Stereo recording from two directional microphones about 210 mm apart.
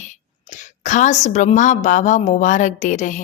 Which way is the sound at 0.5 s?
35° left (ahead or behind).